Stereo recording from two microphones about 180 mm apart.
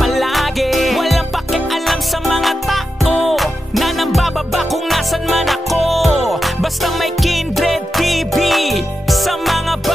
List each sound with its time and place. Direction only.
0.0 s music: centre (ahead or behind)